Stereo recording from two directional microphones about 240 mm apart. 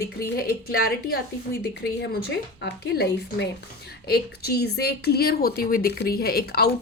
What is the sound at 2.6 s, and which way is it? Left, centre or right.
A woman's voice, left.